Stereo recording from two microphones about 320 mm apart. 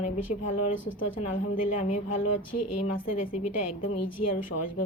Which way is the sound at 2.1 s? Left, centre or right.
Left.